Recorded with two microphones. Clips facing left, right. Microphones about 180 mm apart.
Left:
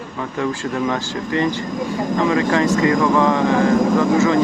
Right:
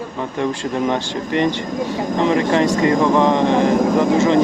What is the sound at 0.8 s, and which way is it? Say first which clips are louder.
Speech: right 2 dB; 20° right (ahead or behind).